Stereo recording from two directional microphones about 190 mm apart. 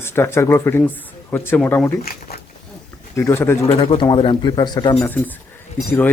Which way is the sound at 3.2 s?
15° left (ahead or behind).